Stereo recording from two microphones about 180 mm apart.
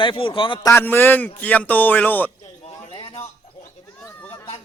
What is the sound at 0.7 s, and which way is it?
Speech, 15° left (ahead or behind).